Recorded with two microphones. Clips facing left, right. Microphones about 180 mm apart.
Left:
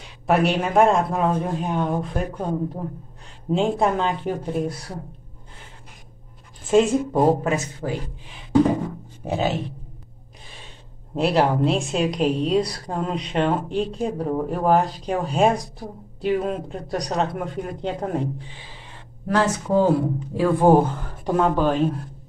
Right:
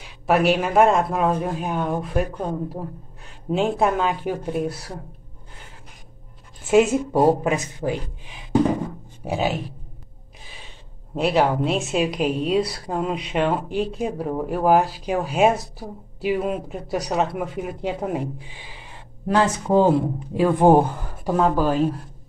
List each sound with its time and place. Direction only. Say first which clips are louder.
0.0 s a woman's voice: right 1 dB; centre (ahead or behind)
3.5 s a woman's voice: even; 5° right (ahead or behind)
6.6 s speech: right 1 dB; 10° right (ahead or behind)
9.2 s speech: even; 10° right (ahead or behind)
10.4 s gasp: even; 5° right (ahead or behind)
11.1 s a woman's voice: even; centre (ahead or behind)
19.2 s speech: right 1 dB; 15° right (ahead or behind)
21.2 s a woman's voice: even; centre (ahead or behind)